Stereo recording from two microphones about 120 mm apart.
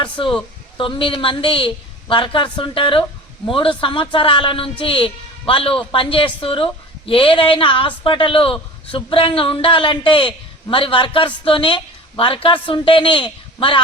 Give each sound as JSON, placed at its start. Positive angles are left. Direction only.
{"t": 0.0, "sound": "a woman's voice", "side_deg": 40}